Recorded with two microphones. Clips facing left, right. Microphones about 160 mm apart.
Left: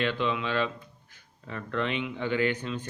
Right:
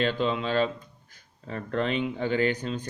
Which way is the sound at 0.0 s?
40° right (ahead or behind).